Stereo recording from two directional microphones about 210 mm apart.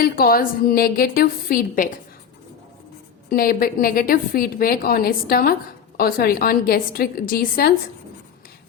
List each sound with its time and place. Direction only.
0.0 s a woman's voice: 45° left (ahead or behind)
3.2 s a woman's voice: 45° left (ahead or behind)